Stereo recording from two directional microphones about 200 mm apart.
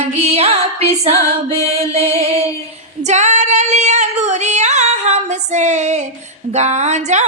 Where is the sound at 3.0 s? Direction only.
35° right (ahead or behind).